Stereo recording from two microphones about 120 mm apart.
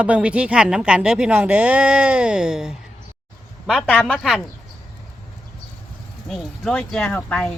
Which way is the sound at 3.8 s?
10° left (ahead or behind).